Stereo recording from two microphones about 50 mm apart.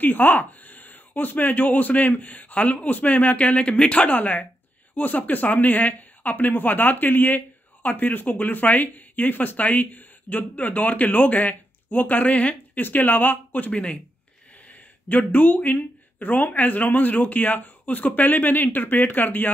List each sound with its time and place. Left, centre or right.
0.0 s speech: left